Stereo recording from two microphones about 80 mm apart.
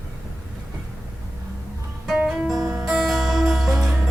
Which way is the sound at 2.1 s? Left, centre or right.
Centre.